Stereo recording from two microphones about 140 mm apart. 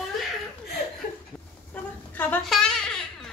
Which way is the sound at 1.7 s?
10° left (ahead or behind).